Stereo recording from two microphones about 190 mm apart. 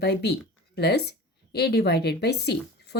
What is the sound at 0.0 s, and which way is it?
A woman's voice, 60° left (ahead or behind).